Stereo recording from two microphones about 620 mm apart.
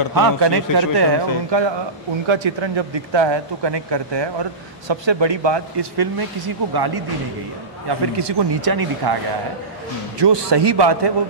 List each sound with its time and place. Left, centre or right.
0.1 s speech: right
8.2 s speech: right